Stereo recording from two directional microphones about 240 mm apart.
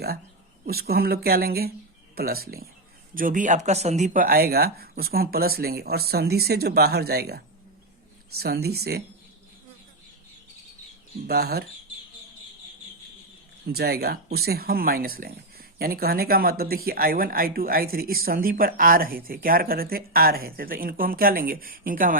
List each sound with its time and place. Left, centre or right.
0.6 s speech: right
11.3 s speech: right
13.7 s speech: right